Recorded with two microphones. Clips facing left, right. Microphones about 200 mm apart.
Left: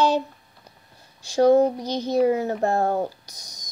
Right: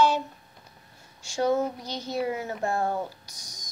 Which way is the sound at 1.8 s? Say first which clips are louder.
Left 9 dB; 20° left (ahead or behind).